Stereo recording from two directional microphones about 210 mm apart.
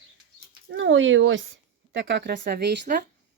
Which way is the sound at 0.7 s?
65° right (ahead or behind).